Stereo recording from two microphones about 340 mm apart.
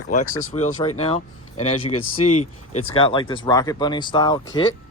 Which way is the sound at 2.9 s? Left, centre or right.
Centre.